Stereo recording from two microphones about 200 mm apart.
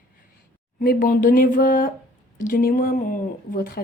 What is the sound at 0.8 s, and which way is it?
Speech, 45° left (ahead or behind).